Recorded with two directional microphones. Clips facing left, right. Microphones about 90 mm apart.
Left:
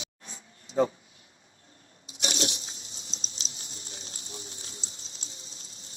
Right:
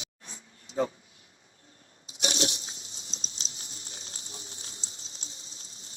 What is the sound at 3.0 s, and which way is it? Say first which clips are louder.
Patter: left 1 dB; 35° left (ahead or behind).